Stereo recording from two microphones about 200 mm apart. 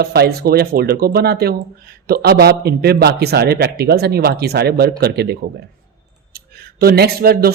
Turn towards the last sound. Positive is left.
turn(degrees=-50)  # may be behind; listen again after turning